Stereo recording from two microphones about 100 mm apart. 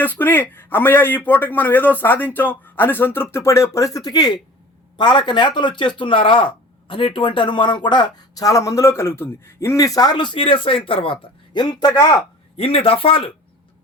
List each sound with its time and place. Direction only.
0.0 s a man's voice: 20° left (ahead or behind); by 11.6 s 60° left (ahead or behind)
11.6 s speech: 40° left (ahead or behind)
12.5 s speech: 70° left (ahead or behind)